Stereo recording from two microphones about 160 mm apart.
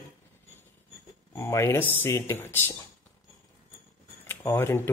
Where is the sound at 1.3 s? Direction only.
15° left (ahead or behind).